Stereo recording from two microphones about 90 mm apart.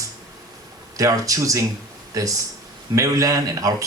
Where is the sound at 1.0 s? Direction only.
40° right (ahead or behind).